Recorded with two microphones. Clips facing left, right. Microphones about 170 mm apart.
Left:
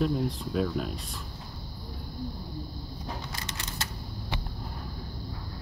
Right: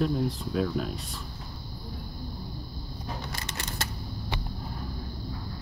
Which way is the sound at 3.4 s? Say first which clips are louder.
Right 2 dB; 55° right (ahead or behind).